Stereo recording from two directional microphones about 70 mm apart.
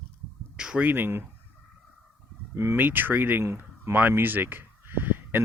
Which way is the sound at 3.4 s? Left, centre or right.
Right.